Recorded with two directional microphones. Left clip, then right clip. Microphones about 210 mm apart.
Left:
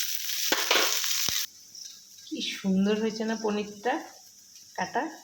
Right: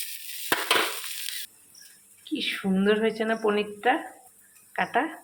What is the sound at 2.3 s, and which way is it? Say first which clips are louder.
Speech: right 3 dB; 15° right (ahead or behind).